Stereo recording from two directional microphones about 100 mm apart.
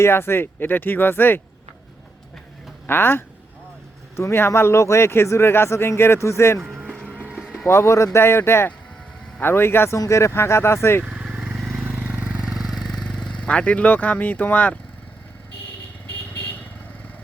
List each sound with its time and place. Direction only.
0.0 s speech: 25° left (ahead or behind)
2.8 s speech: 20° left (ahead or behind)
6.7 s music: 5° right (ahead or behind)
7.3 s vehicle: centre (ahead or behind)
7.7 s speech: 25° left (ahead or behind)
11.0 s vehicle: 10° right (ahead or behind)
11.9 s vehicle: 20° right (ahead or behind); by 14.8 s 15° left (ahead or behind)
16.0 s vehicle: 20° left (ahead or behind)